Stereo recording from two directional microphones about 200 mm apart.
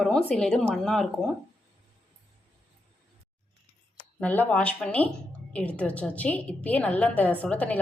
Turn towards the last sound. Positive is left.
turn(degrees=5)  # may be behind; listen again after turning